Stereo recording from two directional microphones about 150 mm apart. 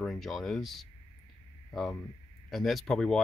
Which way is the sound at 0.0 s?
Centre (ahead or behind).